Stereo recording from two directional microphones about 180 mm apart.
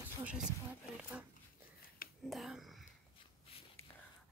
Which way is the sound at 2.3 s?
Centre (ahead or behind).